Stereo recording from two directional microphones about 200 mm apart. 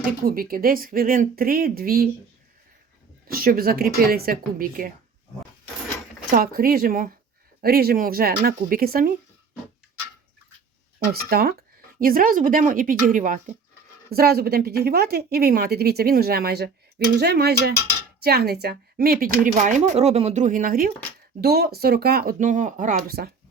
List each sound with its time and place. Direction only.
0.3 s speech: 45° right (ahead or behind)
3.2 s speech: 45° right (ahead or behind)
6.3 s speech: 45° right (ahead or behind)
11.1 s speech: 50° right (ahead or behind)